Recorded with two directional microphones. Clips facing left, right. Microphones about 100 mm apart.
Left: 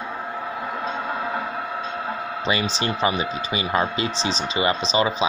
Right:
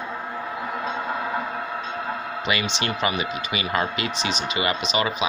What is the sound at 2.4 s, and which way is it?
Speech, 35° left (ahead or behind).